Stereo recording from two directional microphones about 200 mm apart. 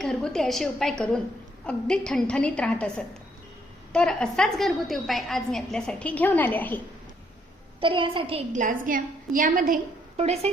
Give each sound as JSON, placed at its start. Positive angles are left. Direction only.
{"t": 0.0, "sound": "a woman's voice", "side_deg": 5}
{"t": 3.9, "sound": "a woman's voice", "side_deg": 5}
{"t": 7.8, "sound": "a woman's voice", "side_deg": -25}